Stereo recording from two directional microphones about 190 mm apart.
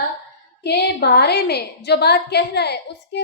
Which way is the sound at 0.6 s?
60° left (ahead or behind).